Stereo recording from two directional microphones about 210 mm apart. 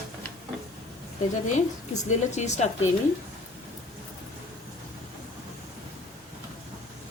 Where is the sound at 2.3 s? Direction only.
35° left (ahead or behind).